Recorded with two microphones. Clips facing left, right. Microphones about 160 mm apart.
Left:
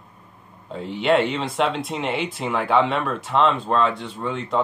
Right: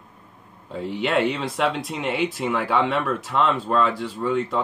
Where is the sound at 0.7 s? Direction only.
Centre (ahead or behind).